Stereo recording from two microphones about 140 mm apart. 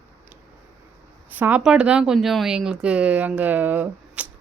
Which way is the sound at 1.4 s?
10° right (ahead or behind).